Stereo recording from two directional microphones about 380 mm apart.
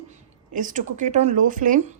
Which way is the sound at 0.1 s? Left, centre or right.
Right.